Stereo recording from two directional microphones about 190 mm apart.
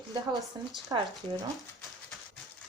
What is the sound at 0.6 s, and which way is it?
Speech, 20° right (ahead or behind).